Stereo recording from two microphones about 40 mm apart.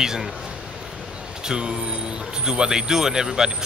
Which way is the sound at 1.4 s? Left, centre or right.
Right.